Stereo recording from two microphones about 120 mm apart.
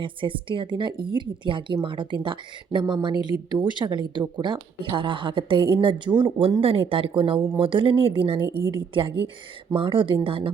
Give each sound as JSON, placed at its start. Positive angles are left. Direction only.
{"t": 0.0, "sound": "speech", "side_deg": -45}
{"t": 6.6, "sound": "speech", "side_deg": -50}